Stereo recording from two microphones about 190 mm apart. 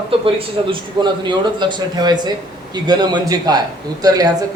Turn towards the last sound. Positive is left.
turn(degrees=-20)  # may be behind; listen again after turning